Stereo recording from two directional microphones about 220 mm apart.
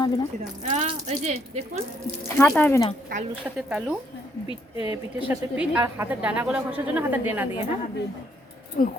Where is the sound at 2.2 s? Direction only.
5° left (ahead or behind).